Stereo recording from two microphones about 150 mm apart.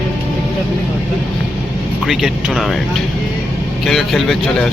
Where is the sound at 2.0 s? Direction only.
Centre (ahead or behind).